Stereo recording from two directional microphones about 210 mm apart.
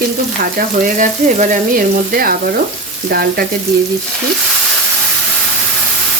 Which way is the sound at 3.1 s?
45° right (ahead or behind).